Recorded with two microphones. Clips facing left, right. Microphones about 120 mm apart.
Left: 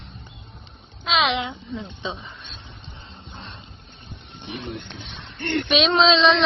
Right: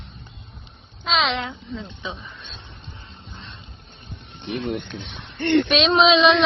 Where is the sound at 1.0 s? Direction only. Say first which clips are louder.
Left 1 dB; centre (ahead or behind).